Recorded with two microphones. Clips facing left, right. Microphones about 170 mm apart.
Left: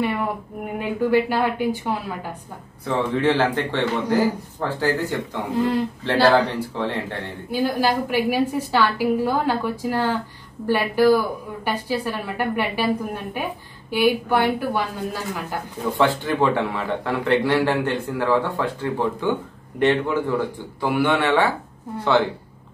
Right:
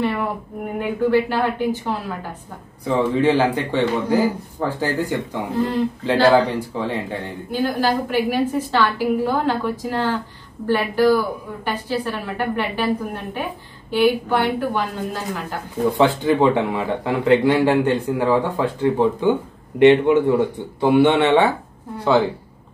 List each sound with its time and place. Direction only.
0.0 s a sound: 10° left (ahead or behind)
0.7 s a woman's voice: 15° left (ahead or behind)
2.8 s a man's voice: 15° right (ahead or behind)
7.5 s a woman's voice: 10° left (ahead or behind)
16.0 s a man's voice: 20° right (ahead or behind)